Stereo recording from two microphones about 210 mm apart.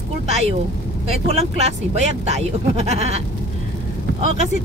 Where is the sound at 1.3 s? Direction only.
30° right (ahead or behind).